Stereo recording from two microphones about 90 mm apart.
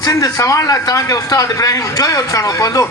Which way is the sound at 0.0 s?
40° left (ahead or behind).